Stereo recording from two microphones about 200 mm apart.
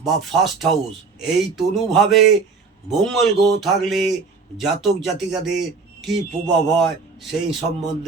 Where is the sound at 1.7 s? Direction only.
Centre (ahead or behind).